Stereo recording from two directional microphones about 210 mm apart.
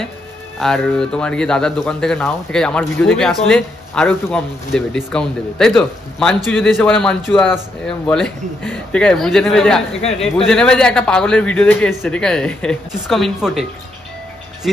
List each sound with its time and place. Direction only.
0.6 s a man's voice: centre (ahead or behind)
10.0 s speech: 30° left (ahead or behind)
10.3 s a man's voice: 5° left (ahead or behind)